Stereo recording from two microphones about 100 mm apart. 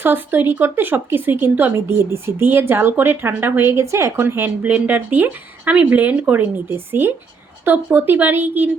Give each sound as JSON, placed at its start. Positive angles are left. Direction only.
{"t": 0.0, "sound": "speech", "side_deg": -20}